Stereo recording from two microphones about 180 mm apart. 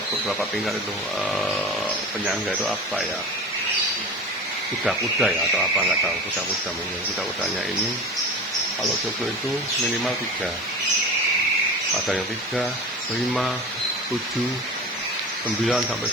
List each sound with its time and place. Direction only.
0.3 s speech: centre (ahead or behind)
2.2 s speech: 5° right (ahead or behind)
4.9 s speech: centre (ahead or behind)
12.0 s speech: centre (ahead or behind)